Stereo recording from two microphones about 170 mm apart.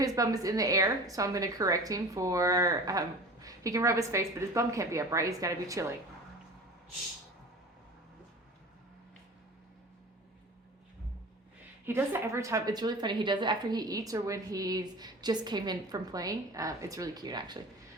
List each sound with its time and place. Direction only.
0.0 s a woman's voice: 20° right (ahead or behind)
11.9 s a woman's voice: 10° right (ahead or behind)